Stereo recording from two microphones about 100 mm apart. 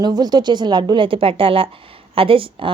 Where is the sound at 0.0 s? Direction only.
45° right (ahead or behind).